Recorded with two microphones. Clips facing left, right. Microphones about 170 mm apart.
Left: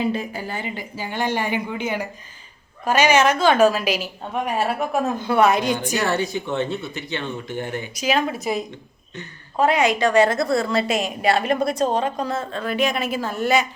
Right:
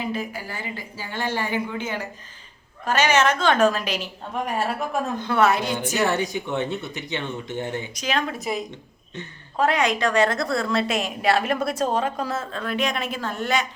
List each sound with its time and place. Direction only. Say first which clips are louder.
0.1 s a woman's voice: left 3 dB; 25° left (ahead or behind)
6.0 s speech: even; 15° right (ahead or behind)
7.9 s a woman's voice: left 6 dB; 10° left (ahead or behind)